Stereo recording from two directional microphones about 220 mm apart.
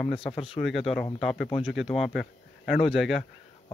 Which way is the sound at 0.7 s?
Centre (ahead or behind).